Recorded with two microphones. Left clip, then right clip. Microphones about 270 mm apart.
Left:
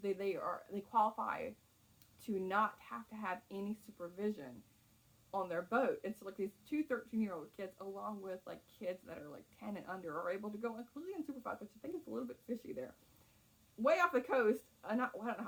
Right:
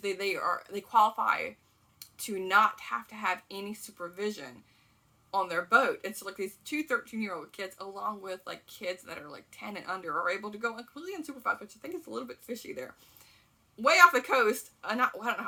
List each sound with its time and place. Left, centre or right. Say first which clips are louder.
0.0 s speech: right 8 dB; centre